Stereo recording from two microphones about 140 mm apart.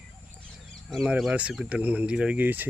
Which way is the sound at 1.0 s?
5° right (ahead or behind).